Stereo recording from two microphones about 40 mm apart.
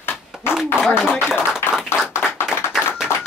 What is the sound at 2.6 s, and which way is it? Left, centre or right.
Tap, left.